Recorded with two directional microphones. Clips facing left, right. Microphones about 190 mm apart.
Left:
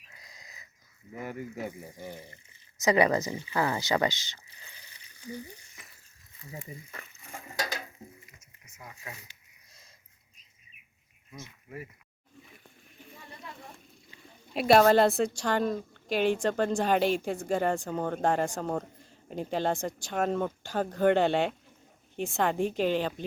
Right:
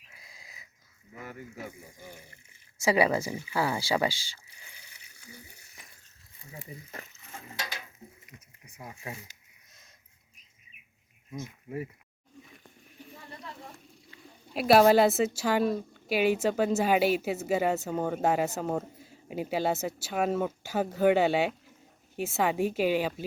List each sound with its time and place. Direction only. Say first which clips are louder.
0.1 s wheeze: left 1 dB; 10° right (ahead or behind)
2.0 s speech: left 6 dB; 10° right (ahead or behind)
7.5 s mechanisms: left 6 dB; 40° left (ahead or behind)
8.6 s speech: right 4 dB; 30° right (ahead or behind)
14.2 s a woman's voice: left 1 dB; centre (ahead or behind)